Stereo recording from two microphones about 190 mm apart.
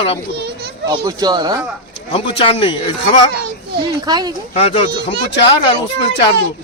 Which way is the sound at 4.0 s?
20° right (ahead or behind).